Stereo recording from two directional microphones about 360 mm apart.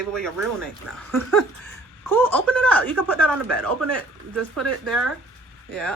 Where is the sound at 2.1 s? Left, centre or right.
Centre.